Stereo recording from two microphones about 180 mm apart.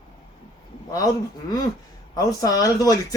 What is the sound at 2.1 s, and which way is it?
Speech, 20° left (ahead or behind).